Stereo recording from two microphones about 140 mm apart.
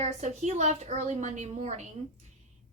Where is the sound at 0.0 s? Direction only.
55° right (ahead or behind).